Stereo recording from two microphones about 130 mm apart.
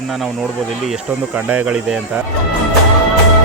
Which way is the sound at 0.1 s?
Centre (ahead or behind).